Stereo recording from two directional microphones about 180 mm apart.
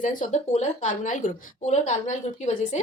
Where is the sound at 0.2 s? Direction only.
40° left (ahead or behind).